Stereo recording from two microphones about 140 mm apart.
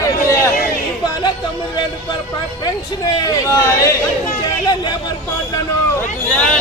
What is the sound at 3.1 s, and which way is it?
Speech, 30° left (ahead or behind).